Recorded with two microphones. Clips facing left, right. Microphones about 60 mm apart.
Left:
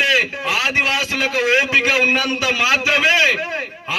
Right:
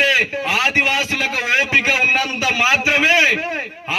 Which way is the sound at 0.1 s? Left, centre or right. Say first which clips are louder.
Even; right.